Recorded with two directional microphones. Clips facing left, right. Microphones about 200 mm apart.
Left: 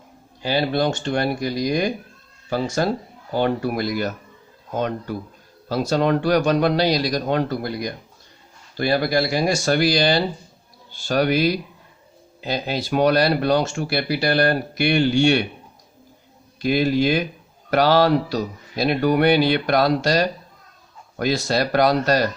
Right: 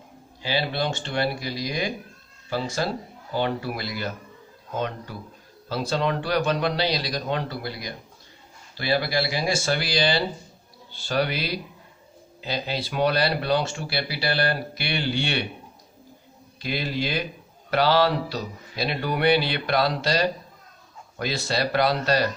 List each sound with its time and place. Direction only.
0.4 s speech: 45° left (ahead or behind)
16.6 s speech: 45° left (ahead or behind)